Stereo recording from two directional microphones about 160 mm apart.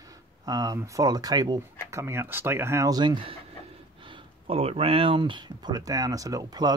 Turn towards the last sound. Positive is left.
turn(degrees=-25)  # may be behind; listen again after turning